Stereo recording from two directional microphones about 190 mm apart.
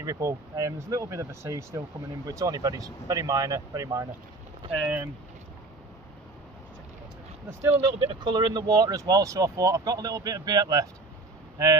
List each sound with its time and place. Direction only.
0.0 s speech: 20° right (ahead or behind)
4.7 s speech: 5° right (ahead or behind)
7.4 s speech: 10° right (ahead or behind)
7.8 s speech: 25° right (ahead or behind)